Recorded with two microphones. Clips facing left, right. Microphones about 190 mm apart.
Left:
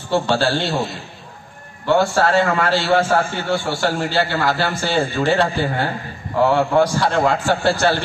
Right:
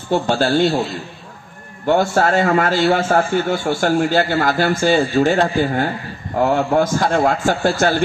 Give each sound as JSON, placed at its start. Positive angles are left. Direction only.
{"t": 0.1, "sound": "a man's voice", "side_deg": -45}
{"t": 1.9, "sound": "a man's voice", "side_deg": -45}